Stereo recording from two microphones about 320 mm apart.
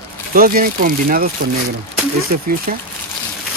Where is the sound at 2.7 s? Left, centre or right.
Right.